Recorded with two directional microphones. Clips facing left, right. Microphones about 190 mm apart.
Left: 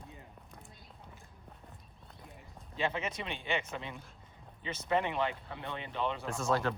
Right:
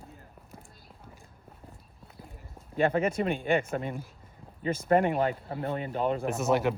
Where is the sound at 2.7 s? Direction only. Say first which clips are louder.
Right 10 dB; 50° right (ahead or behind).